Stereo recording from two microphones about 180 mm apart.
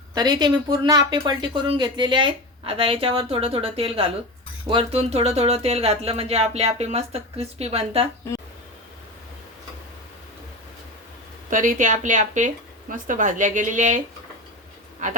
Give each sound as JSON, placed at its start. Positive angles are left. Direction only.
{"t": 0.1, "sound": "speech", "side_deg": -25}
{"t": 11.5, "sound": "speech", "side_deg": -45}